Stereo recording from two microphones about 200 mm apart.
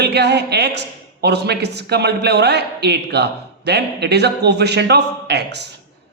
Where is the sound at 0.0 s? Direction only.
55° right (ahead or behind).